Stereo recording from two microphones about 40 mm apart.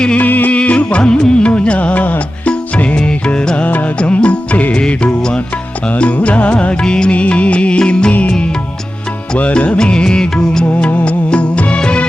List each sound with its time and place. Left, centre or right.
0.2 s music: left
0.5 s music: left
2.5 s music: left
6.0 s music: left
6.8 s music: centre
7.1 s music: left
9.4 s music: left
10.8 s music: left